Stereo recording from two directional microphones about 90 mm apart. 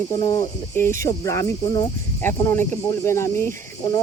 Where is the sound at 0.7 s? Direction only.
30° left (ahead or behind).